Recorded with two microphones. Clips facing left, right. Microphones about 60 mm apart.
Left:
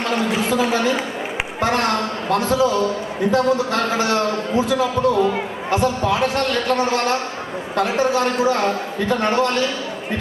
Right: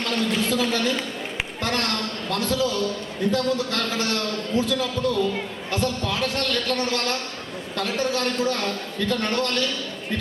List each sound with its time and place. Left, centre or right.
0.0 s a woman's voice: centre